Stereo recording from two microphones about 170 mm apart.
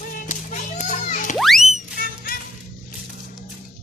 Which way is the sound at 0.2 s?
50° left (ahead or behind).